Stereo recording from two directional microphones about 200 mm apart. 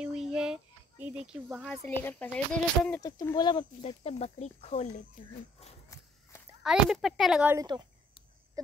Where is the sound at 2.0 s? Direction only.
10° left (ahead or behind).